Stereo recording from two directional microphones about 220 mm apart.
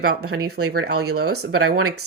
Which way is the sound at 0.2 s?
85° right.